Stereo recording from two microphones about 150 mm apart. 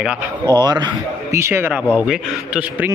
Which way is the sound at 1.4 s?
15° right (ahead or behind).